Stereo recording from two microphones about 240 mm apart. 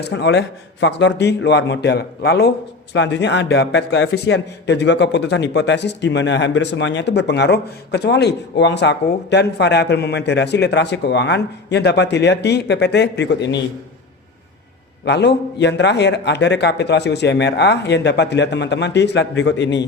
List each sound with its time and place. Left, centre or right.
0.0 s a man's voice: left
15.0 s a man's voice: left